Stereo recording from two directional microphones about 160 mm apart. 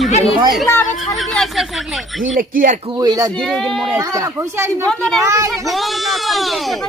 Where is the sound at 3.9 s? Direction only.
20° right (ahead or behind).